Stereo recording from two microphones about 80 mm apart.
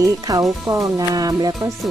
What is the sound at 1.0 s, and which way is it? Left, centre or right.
Speech, right.